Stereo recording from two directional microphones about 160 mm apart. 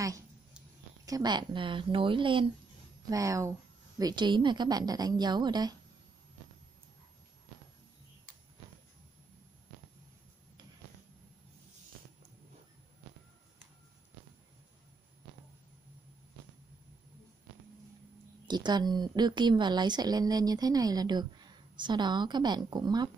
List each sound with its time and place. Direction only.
1.0 s speech: 25° right (ahead or behind)
3.1 s a woman's voice: 20° right (ahead or behind)
18.5 s a woman's voice: 25° right (ahead or behind)